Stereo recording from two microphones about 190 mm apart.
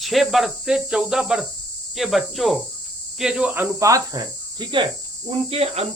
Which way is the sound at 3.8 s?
20° right (ahead or behind).